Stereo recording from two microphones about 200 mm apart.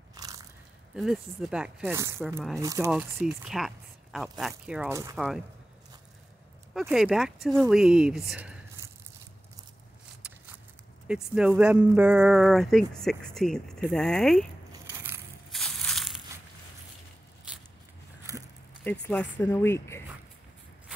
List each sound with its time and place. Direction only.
0.1 s biting: 15° right (ahead or behind)
0.9 s speech: centre (ahead or behind); by 2.9 s 15° right (ahead or behind)
2.9 s speech: 5° right (ahead or behind)
5.1 s speech: centre (ahead or behind)
6.7 s speech: centre (ahead or behind)
11.1 s speech: 5° right (ahead or behind)
14.7 s biting: 15° right (ahead or behind)
15.5 s crushing: centre (ahead or behind)
17.5 s biting: 5° right (ahead or behind)
18.3 s a sound: 15° right (ahead or behind)
18.9 s speech: 5° left (ahead or behind)